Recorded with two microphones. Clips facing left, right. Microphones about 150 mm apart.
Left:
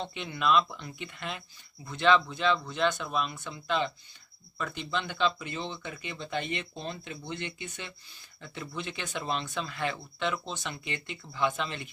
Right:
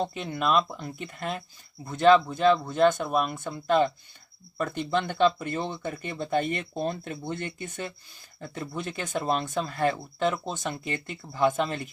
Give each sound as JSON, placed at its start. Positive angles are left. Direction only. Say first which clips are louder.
{"t": 0.0, "sound": "speech", "louder": "right 3 dB", "side_deg": -40}